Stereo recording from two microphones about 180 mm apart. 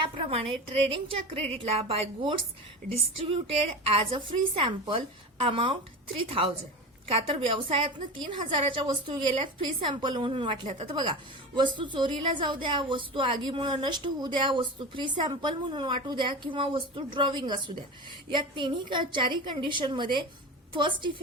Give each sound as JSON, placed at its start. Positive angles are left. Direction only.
{"t": 0.2, "sound": "a woman's voice", "side_deg": -30}
{"t": 7.1, "sound": "a woman's voice", "side_deg": -30}